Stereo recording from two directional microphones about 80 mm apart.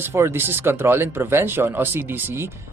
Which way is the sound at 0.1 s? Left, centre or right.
Right.